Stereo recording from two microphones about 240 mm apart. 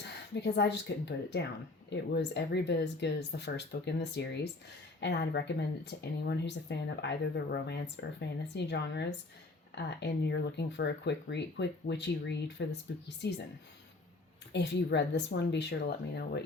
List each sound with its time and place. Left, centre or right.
0.0 s speech: left
14.5 s speech: left